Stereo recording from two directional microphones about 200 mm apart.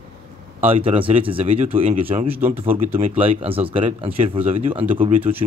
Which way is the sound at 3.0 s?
30° right (ahead or behind).